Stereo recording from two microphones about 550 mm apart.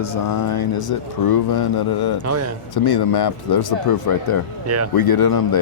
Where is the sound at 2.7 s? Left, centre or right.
Left.